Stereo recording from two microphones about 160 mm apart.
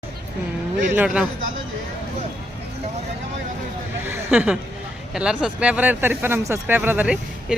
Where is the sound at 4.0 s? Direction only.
15° right (ahead or behind).